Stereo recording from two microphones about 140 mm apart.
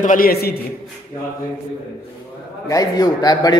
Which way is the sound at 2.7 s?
25° left (ahead or behind).